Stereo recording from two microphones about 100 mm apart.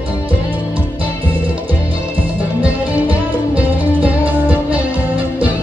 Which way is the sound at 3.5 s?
15° right (ahead or behind).